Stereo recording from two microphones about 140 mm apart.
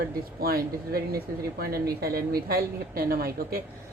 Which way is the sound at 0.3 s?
90° right.